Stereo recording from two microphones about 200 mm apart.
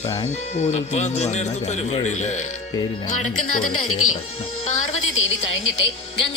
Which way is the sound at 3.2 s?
90° left.